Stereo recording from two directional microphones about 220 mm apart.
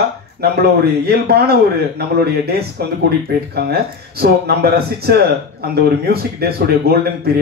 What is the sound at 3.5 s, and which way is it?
Speech, 45° right (ahead or behind).